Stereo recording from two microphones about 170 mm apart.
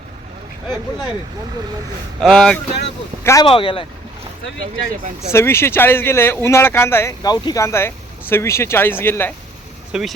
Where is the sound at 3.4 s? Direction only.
30° left (ahead or behind).